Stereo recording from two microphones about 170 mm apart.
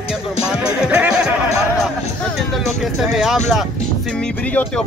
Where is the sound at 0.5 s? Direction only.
5° right (ahead or behind).